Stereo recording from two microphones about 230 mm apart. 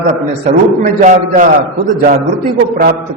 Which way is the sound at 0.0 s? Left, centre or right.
Right.